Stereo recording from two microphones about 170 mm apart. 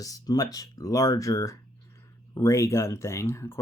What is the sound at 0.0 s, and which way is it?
Speech, 20° left (ahead or behind).